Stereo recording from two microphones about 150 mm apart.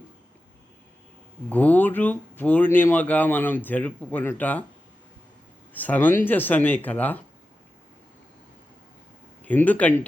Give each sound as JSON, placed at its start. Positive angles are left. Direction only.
{"t": 1.5, "sound": "speech", "side_deg": 10}
{"t": 5.7, "sound": "speech", "side_deg": 10}
{"t": 9.4, "sound": "speech", "side_deg": 10}